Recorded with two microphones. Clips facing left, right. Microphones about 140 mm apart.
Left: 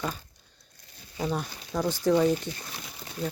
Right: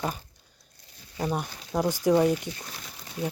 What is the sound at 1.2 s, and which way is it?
Speech, 15° right (ahead or behind).